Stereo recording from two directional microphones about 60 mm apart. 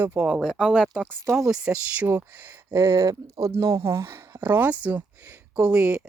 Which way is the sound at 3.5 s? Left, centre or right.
Right.